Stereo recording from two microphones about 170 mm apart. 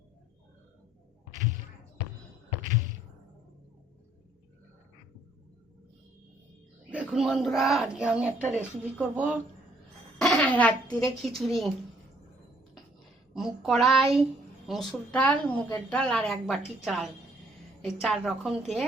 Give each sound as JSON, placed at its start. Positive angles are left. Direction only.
{"t": 2.6, "sound": "a sound", "side_deg": -50}
{"t": 6.9, "sound": "speech", "side_deg": -5}
{"t": 10.2, "sound": "speech", "side_deg": 5}
{"t": 13.3, "sound": "a woman's voice", "side_deg": 0}